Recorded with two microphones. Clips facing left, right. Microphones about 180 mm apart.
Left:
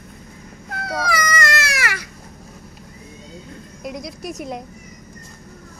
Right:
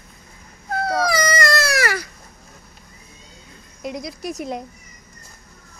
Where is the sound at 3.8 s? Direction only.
Centre (ahead or behind).